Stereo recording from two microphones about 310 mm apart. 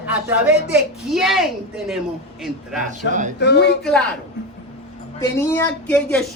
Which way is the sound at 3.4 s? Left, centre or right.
Left.